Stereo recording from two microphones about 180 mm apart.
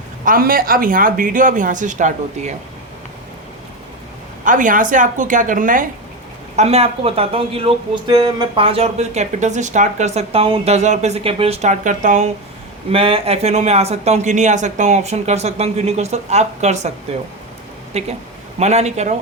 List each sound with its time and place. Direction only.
0.3 s speech: 55° right (ahead or behind)
4.4 s speech: 45° right (ahead or behind)
6.6 s speech: 35° right (ahead or behind)
12.9 s speech: 30° right (ahead or behind)
17.9 s speech: 35° right (ahead or behind)